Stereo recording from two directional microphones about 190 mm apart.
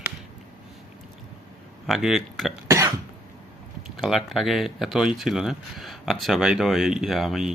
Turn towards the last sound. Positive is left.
turn(degrees=0)  # may be behind; listen again after turning